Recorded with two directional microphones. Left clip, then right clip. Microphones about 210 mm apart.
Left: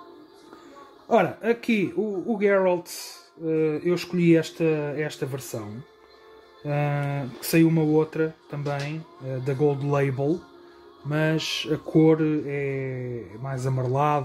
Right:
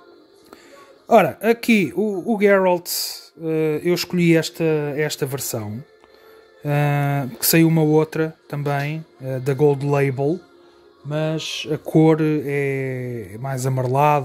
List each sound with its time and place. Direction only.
1.0 s speech: 45° right (ahead or behind)
11.1 s mantra: 20° right (ahead or behind)
11.7 s speech: 45° right (ahead or behind)